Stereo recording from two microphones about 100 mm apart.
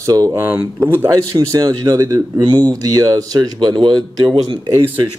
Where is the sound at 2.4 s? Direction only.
45° right (ahead or behind).